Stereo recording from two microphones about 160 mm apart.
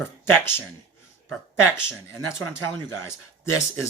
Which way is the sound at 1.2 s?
15° left (ahead or behind).